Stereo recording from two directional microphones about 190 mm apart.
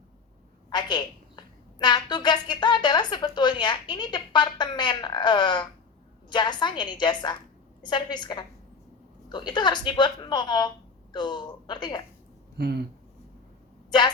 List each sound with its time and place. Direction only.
0.7 s a woman's voice: 25° left (ahead or behind)
12.5 s speech: 55° right (ahead or behind)